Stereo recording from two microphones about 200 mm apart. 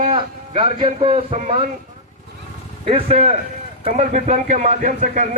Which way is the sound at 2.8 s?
30° right (ahead or behind).